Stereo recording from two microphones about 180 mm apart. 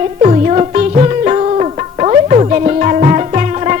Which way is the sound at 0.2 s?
35° right (ahead or behind).